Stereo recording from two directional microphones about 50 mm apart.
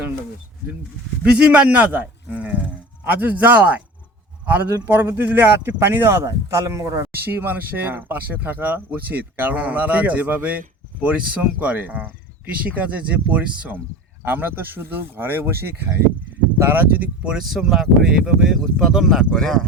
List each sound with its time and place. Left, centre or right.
1.2 s speech: right
6.2 s speech: right
7.1 s speech: right
14.3 s speech: right
17.4 s speech: centre